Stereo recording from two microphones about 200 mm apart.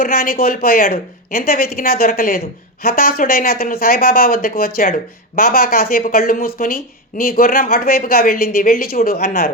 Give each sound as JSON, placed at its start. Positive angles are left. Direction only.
{"t": 0.0, "sound": "speech", "side_deg": 45}